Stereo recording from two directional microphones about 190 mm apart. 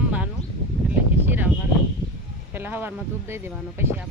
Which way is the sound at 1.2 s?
10° right (ahead or behind).